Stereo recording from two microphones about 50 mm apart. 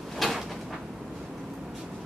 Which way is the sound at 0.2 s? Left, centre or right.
Centre.